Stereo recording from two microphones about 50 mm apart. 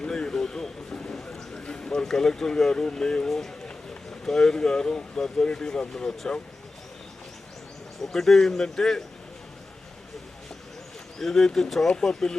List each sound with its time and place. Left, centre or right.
0.0 s a sound: centre
1.2 s speech: centre
8.0 s speech: centre
11.2 s speech: centre